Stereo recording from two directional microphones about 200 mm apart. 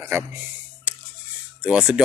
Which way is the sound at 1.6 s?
5° right (ahead or behind).